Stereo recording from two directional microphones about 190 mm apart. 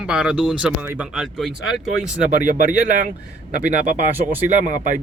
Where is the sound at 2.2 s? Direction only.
45° right (ahead or behind).